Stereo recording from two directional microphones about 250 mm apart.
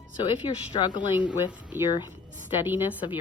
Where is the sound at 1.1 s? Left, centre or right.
Centre.